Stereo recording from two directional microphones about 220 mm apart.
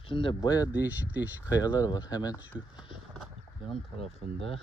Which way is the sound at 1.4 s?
15° left (ahead or behind).